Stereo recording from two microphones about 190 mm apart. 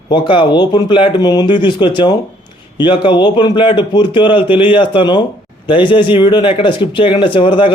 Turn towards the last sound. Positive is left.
turn(degrees=25)  # may be behind; listen again after turning